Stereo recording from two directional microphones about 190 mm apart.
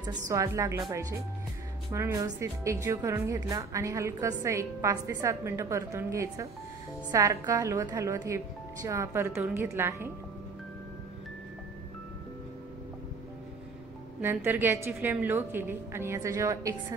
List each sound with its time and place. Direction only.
0.3 s speech: 15° right (ahead or behind)
14.2 s speech: 10° right (ahead or behind)